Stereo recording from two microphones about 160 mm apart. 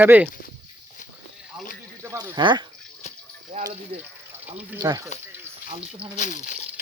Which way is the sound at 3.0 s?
45° left (ahead or behind).